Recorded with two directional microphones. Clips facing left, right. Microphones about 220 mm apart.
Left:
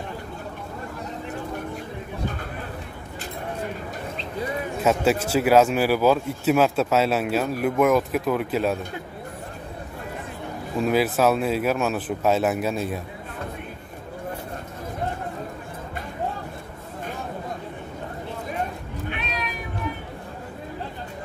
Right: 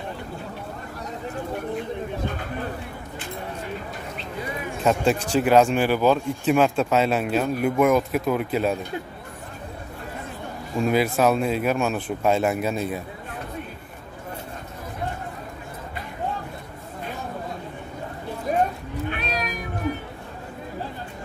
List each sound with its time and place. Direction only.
4.8 s speech: 5° left (ahead or behind)
10.8 s speech: centre (ahead or behind)
18.5 s a sound: 40° right (ahead or behind)
19.0 s cat: 40° right (ahead or behind)